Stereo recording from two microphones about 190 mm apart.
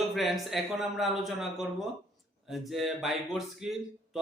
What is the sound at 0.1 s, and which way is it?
A man's voice, centre (ahead or behind).